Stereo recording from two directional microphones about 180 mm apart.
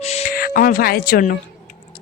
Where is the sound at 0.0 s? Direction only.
35° left (ahead or behind).